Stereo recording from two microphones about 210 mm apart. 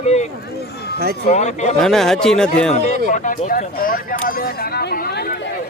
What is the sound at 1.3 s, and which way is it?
Speech, 35° left (ahead or behind).